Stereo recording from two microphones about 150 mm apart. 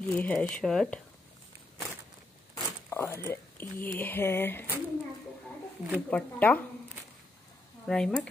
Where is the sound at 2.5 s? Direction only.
15° left (ahead or behind).